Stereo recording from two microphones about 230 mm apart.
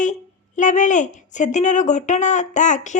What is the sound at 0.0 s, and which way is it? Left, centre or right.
A woman's voice, left.